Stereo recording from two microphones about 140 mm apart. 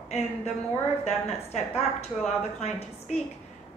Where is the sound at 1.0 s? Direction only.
50° left (ahead or behind).